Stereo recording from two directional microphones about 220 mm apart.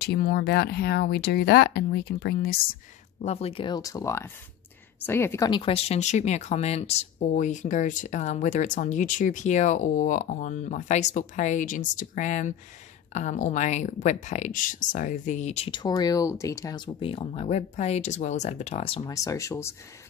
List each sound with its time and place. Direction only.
0.0 s speech: 45° left (ahead or behind); by 19.7 s 15° left (ahead or behind)